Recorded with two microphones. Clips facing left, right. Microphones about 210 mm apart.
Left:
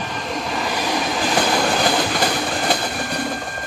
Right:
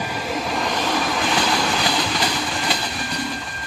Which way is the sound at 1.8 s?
50° left (ahead or behind).